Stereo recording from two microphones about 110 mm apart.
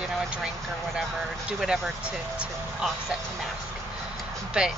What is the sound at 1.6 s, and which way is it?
Speech, 10° right (ahead or behind).